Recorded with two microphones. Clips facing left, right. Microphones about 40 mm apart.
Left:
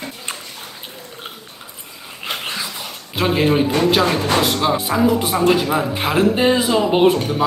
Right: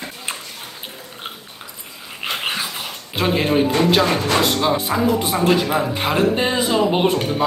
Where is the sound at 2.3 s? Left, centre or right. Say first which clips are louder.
Right 2 dB; right.